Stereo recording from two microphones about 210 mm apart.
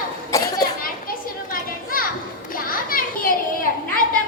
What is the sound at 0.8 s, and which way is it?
Children playing, 45° left (ahead or behind).